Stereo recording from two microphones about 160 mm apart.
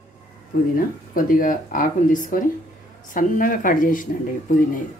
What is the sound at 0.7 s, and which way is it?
Speech, 60° left (ahead or behind).